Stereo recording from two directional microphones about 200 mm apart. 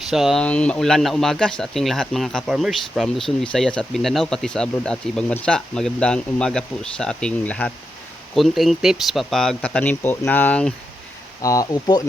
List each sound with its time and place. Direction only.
0.1 s speech: centre (ahead or behind)
11.4 s speech: 20° left (ahead or behind)